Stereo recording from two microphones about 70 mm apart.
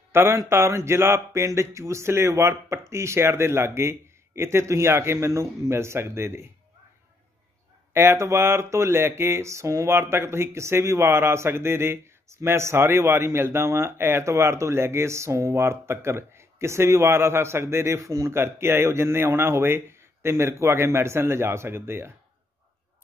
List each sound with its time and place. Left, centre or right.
0.1 s speech: right
7.9 s speech: right
18.3 s speech: right